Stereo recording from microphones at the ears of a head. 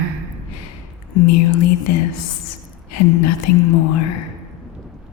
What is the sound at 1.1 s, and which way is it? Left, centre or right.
Speech, left.